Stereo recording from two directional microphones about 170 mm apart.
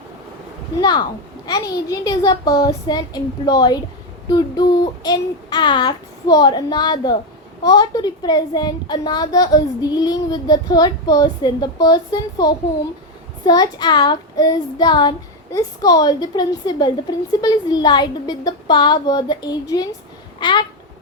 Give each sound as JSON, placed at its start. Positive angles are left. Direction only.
{"t": 0.8, "sound": "a child's voice", "side_deg": 25}